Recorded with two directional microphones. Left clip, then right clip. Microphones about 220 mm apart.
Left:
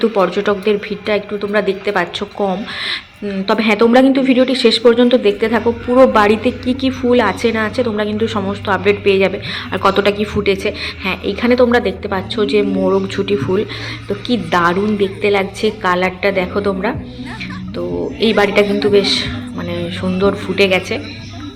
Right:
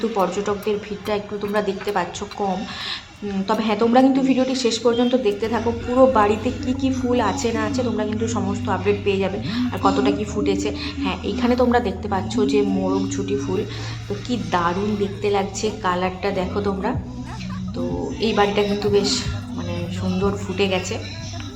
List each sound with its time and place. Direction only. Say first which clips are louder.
0.0 s a woman's voice: left 7 dB; 10° left (ahead or behind)
12.8 s a woman's voice: left 8 dB; 20° left (ahead or behind)
18.2 s a woman's voice: left 6 dB; 15° left (ahead or behind)